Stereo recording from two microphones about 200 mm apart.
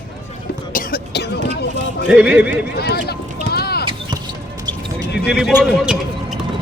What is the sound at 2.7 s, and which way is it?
Speech, 50° left (ahead or behind).